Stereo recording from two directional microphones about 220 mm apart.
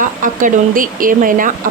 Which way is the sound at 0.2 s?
35° right (ahead or behind).